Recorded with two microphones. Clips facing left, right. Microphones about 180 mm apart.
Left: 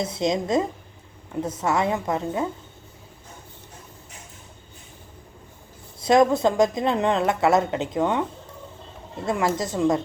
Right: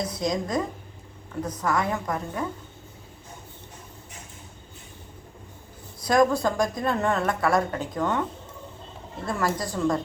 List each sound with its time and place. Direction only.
0.0 s a woman's voice: 25° left (ahead or behind)
6.0 s a woman's voice: 25° left (ahead or behind)
9.2 s a woman's voice: 20° left (ahead or behind)